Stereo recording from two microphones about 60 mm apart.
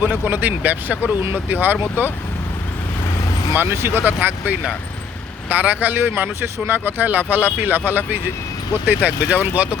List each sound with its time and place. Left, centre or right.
0.3 s speech: right
3.5 s speech: right